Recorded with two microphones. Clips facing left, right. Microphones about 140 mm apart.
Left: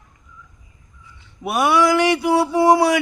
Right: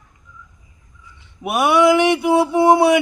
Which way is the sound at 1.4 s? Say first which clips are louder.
Right 2 dB; 20° right (ahead or behind).